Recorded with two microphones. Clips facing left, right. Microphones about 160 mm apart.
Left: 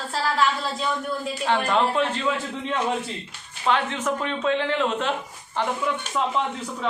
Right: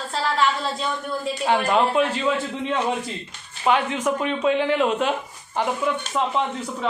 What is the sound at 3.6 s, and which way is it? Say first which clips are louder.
Speech: right 3 dB; 10° right (ahead or behind).